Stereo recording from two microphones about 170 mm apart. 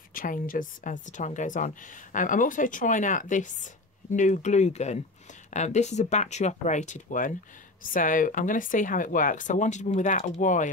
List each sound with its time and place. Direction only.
0.1 s speech: 55° left (ahead or behind)